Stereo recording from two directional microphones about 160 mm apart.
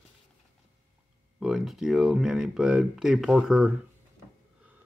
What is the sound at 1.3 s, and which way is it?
Speech, centre (ahead or behind).